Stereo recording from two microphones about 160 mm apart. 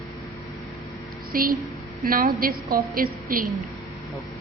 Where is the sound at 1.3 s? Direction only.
60° right (ahead or behind).